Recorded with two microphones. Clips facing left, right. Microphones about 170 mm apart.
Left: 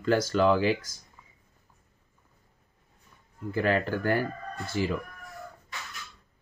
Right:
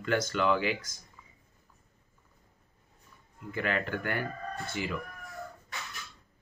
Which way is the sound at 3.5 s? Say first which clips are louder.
Left 6 dB; 35° left (ahead or behind).